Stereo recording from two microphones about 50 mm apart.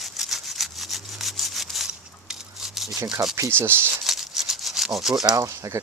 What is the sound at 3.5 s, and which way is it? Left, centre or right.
Speech, right.